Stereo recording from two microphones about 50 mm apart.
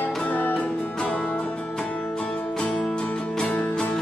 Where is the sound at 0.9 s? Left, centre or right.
Left.